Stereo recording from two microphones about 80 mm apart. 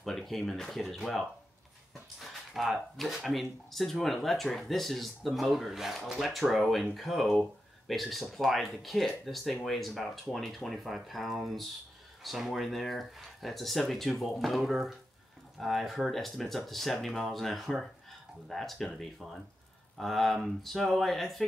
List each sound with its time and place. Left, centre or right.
0.0 s speech: centre